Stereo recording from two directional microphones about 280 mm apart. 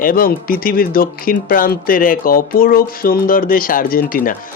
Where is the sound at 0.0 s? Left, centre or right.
Left.